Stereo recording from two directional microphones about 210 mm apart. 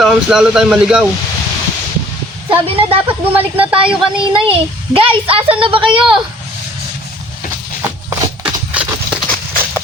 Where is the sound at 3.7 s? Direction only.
25° right (ahead or behind).